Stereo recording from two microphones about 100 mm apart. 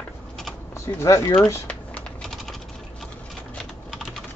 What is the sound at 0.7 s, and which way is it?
Speech, 30° left (ahead or behind).